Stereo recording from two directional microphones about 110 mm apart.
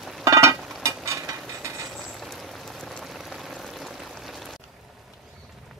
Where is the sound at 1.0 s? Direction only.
30° right (ahead or behind).